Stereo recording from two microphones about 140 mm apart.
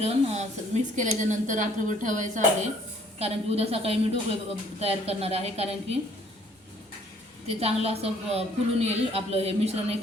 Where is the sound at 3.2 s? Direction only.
45° right (ahead or behind).